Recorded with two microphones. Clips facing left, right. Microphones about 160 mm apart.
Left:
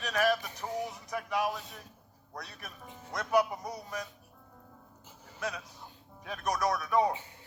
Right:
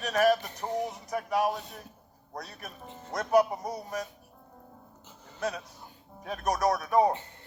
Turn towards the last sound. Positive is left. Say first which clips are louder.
# right 3 dB
turn(degrees=10)  # may be behind; listen again after turning